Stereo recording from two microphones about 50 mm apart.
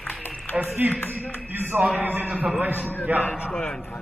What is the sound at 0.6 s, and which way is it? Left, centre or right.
A man's voice, right.